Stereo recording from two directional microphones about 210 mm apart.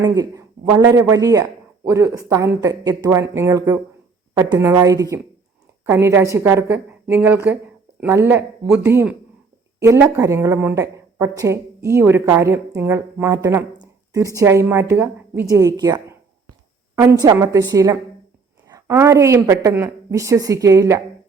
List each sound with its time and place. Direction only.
0.0 s speech: 15° right (ahead or behind)
17.2 s speech: 20° right (ahead or behind)